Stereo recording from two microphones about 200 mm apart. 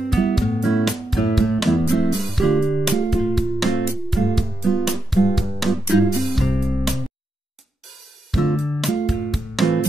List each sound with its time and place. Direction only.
0.1 s music: centre (ahead or behind)
8.3 s music: centre (ahead or behind)